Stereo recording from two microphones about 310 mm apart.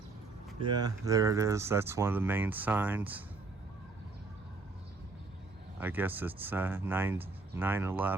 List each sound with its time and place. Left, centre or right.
0.7 s speech: centre
5.8 s speech: centre